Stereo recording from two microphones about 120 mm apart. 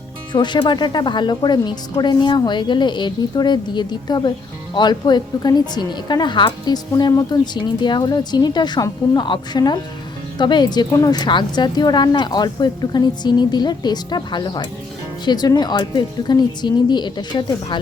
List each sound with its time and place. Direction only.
0.3 s a woman's voice: 40° left (ahead or behind)